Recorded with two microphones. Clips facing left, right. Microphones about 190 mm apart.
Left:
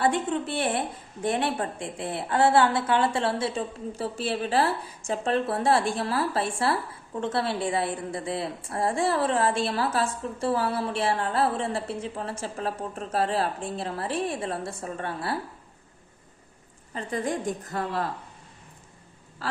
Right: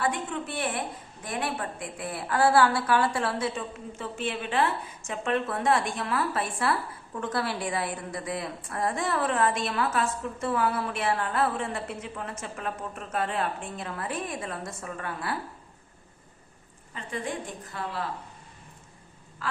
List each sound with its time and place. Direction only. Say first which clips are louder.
0.0 s a woman's voice: left 5 dB; 30° left (ahead or behind)
16.9 s a woman's voice: left 5 dB; 40° left (ahead or behind)
19.4 s vehicle: left 2 dB; 35° left (ahead or behind)